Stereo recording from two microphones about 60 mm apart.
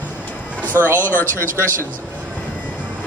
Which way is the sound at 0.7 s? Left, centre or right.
Right.